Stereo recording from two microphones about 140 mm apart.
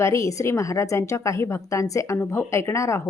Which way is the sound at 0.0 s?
20° left (ahead or behind).